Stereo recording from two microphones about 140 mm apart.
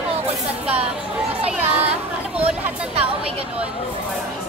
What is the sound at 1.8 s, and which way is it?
Chatter, 45° right (ahead or behind).